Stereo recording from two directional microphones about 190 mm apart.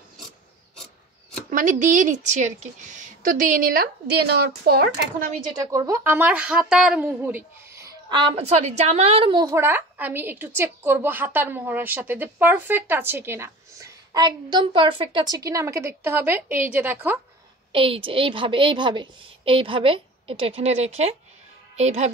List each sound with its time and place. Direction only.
1.5 s a woman's voice: 45° right (ahead or behind)
5.4 s a woman's voice: 20° right (ahead or behind)
17.7 s a woman's voice: 30° right (ahead or behind)